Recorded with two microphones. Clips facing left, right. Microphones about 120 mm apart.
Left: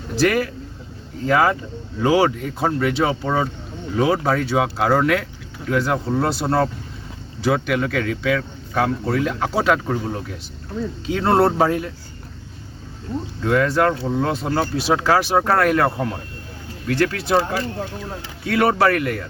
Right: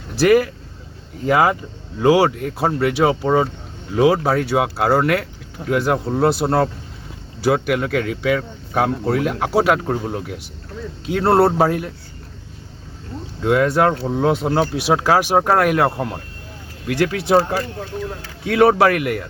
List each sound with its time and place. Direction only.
0.2 s a man's voice: 10° right (ahead or behind)
13.4 s a man's voice: 15° right (ahead or behind)